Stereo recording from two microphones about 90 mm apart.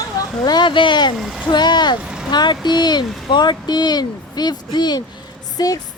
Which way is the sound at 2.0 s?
10° right (ahead or behind).